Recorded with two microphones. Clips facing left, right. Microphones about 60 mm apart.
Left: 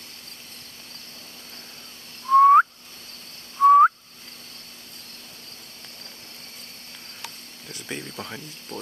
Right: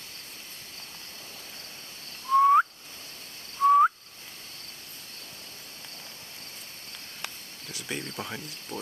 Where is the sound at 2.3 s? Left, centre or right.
Centre.